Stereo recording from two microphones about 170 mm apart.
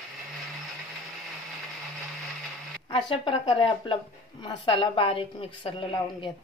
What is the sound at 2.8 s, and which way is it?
A woman's voice, 25° left (ahead or behind).